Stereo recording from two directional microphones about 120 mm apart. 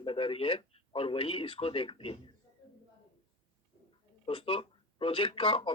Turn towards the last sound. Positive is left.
turn(degrees=50)  # may be behind; listen again after turning